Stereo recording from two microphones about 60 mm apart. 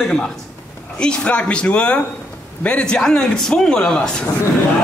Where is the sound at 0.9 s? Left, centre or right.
Centre.